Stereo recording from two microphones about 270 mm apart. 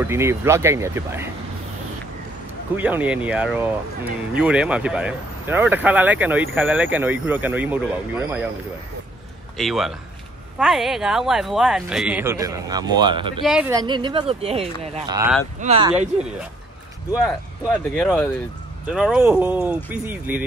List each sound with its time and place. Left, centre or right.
0.0 s speech: centre
2.7 s speech: centre
9.6 s speech: centre
13.4 s speech: centre; by 16.1 s right
17.9 s speech: centre